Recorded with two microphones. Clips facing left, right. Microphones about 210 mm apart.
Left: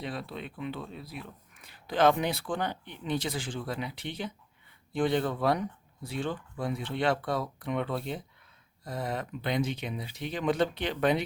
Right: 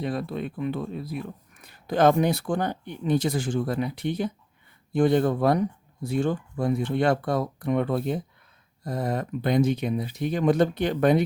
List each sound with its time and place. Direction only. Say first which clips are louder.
0.0 s speech: right 8 dB; 45° right (ahead or behind)